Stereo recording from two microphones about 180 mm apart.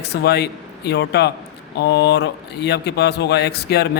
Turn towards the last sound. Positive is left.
turn(degrees=65)  # may be behind; listen again after turning